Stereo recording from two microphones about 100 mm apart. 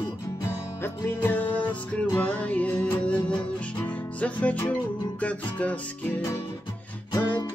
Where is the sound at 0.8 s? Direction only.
20° left (ahead or behind).